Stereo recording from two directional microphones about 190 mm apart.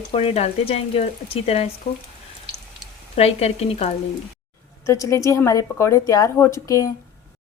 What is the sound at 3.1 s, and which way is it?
Speech, 35° left (ahead or behind).